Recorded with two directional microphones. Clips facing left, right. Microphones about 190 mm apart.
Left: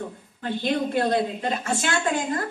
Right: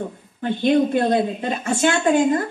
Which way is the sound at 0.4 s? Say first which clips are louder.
Right 7 dB; 20° right (ahead or behind).